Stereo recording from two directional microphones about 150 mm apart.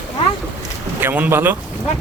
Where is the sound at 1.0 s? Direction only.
10° right (ahead or behind).